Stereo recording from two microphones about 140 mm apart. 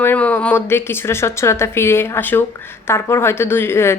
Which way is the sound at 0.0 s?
10° left (ahead or behind).